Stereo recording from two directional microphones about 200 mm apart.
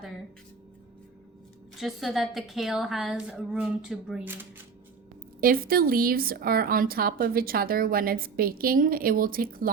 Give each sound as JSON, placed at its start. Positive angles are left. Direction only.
{"t": 1.8, "sound": "a woman's voice", "side_deg": 0}
{"t": 5.4, "sound": "a woman's voice", "side_deg": -45}